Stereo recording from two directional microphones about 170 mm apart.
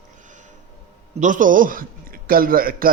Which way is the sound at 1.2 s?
50° right (ahead or behind).